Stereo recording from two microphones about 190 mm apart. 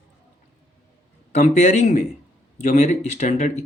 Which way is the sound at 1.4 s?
40° left (ahead or behind).